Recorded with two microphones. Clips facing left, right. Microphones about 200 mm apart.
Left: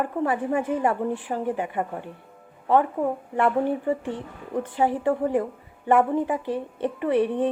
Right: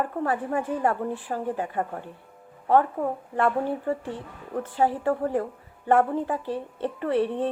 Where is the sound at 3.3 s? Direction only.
15° left (ahead or behind).